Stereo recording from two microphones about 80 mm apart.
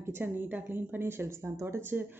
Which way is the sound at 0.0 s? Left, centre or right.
Right.